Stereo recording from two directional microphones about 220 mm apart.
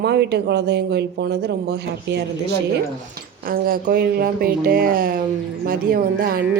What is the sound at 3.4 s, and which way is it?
Speech, 40° right (ahead or behind).